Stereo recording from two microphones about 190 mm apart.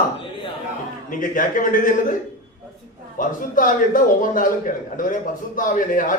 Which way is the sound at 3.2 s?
45° left (ahead or behind).